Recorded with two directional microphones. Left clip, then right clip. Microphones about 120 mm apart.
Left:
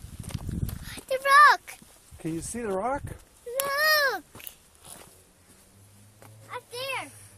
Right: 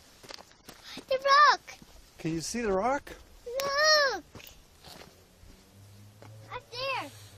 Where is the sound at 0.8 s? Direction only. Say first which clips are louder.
Left 1 dB; 25° left (ahead or behind).